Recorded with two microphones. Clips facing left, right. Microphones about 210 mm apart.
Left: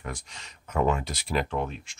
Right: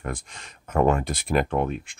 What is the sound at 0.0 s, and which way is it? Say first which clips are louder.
Speech: right 5 dB; 50° right (ahead or behind).